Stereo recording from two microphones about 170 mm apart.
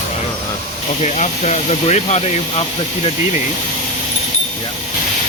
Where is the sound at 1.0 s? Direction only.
40° left (ahead or behind).